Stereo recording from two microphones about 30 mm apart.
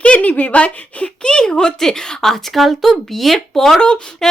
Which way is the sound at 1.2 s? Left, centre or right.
Left.